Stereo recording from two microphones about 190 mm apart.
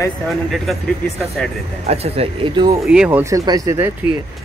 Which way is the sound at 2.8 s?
5° right (ahead or behind).